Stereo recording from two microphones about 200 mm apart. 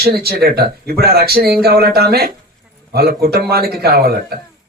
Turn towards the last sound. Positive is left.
turn(degrees=-50)  # may be behind; listen again after turning